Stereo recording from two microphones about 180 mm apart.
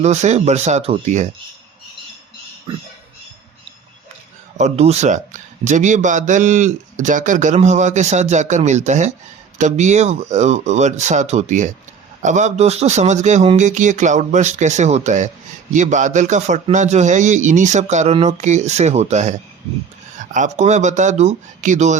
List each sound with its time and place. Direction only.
0.0 s a man's voice: 40° right (ahead or behind)
2.7 s speech: 25° right (ahead or behind)
4.5 s a man's voice: 40° right (ahead or behind)